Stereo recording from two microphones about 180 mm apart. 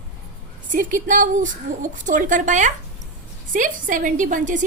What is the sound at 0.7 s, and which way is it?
Speech, 45° right (ahead or behind).